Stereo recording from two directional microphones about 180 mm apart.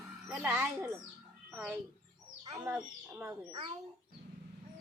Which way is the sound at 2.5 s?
20° right (ahead or behind).